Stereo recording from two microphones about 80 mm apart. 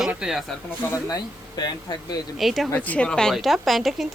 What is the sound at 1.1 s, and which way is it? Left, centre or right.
Speech, left.